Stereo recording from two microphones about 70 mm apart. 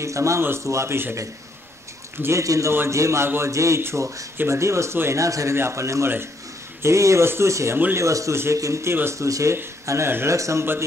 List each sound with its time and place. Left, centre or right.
0.0 s a man's voice: right
2.4 s a man's voice: right
5.2 s a man's voice: right
7.7 s speech: right
8.0 s a man's voice: right
10.3 s a man's voice: right